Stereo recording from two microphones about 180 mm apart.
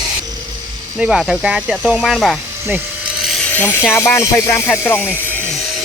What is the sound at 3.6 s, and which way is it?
Speech, 10° left (ahead or behind).